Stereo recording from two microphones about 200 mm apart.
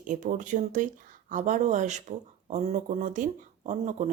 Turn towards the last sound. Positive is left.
turn(degrees=-35)  # may be behind; listen again after turning